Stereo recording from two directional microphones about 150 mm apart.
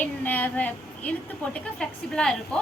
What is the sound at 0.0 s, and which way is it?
A woman's voice, 10° left (ahead or behind).